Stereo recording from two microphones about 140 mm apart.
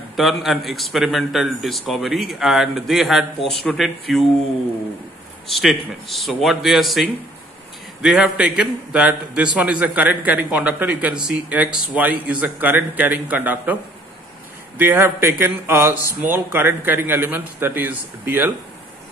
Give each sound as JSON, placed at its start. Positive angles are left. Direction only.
{"t": 0.1, "sound": "a man's voice", "side_deg": 0}
{"t": 5.5, "sound": "a man's voice", "side_deg": 0}
{"t": 14.8, "sound": "a man's voice", "side_deg": -15}